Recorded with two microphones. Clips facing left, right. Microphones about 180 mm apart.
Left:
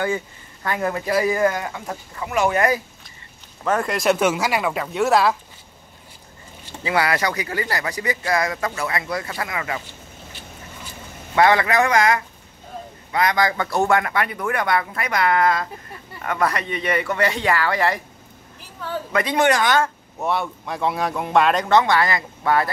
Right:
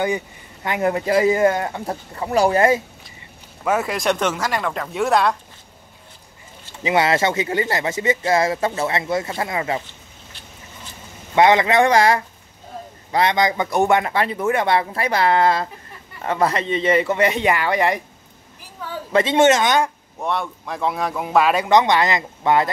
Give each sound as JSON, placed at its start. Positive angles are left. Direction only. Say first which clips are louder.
{"t": 0.7, "sound": "speech", "louder": "right 3 dB", "side_deg": -20}
{"t": 3.6, "sound": "speech", "louder": "even", "side_deg": -5}
{"t": 6.8, "sound": "speech", "louder": "right 3 dB", "side_deg": -20}
{"t": 11.3, "sound": "speech", "louder": "right 2 dB", "side_deg": -20}
{"t": 19.1, "sound": "speech", "louder": "right 4 dB", "side_deg": -25}
{"t": 20.2, "sound": "speech", "louder": "left 1 dB", "side_deg": 5}
{"t": 21.6, "sound": "speech", "louder": "right 2 dB", "side_deg": -20}